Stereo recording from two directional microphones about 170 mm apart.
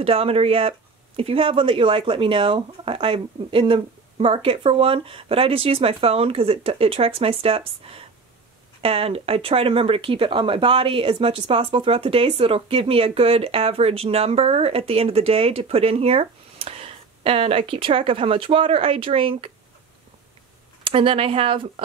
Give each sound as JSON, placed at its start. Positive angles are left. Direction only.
{"t": 0.0, "sound": "speech", "side_deg": -35}
{"t": 20.8, "sound": "speech", "side_deg": -30}